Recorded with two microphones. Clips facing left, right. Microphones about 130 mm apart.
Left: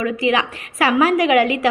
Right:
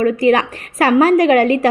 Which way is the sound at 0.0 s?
45° right (ahead or behind).